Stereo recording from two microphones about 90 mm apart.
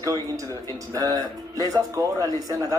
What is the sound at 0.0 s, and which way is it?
Speech, 40° right (ahead or behind).